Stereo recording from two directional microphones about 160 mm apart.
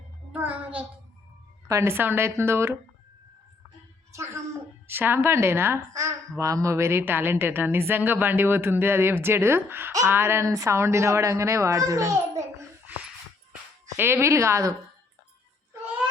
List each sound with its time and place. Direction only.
0.3 s a child's voice: 10° right (ahead or behind)
4.9 s a woman's voice: 15° right (ahead or behind)
13.8 s a woman's voice: 15° right (ahead or behind)
15.7 s music: 15° right (ahead or behind)